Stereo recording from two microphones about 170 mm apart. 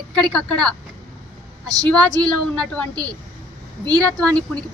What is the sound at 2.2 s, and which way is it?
A woman's voice, 5° left (ahead or behind).